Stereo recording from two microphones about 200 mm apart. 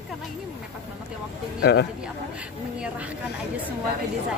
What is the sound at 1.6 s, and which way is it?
Speech, 55° left (ahead or behind).